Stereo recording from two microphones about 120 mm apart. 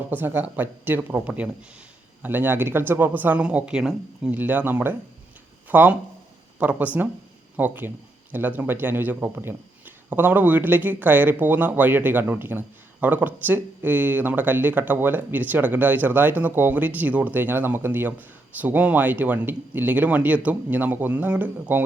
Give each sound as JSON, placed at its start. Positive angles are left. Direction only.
{"t": 0.1, "sound": "speech", "side_deg": -15}